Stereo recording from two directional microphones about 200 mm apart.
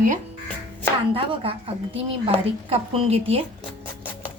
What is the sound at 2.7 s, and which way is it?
Speech, 30° right (ahead or behind).